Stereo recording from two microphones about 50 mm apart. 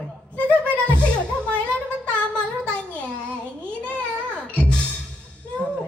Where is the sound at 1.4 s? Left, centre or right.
Left.